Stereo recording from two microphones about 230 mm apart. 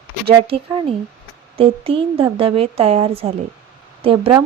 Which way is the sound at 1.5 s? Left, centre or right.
Right.